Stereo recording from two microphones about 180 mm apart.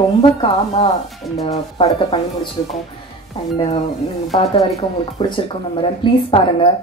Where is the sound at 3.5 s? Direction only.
25° left (ahead or behind).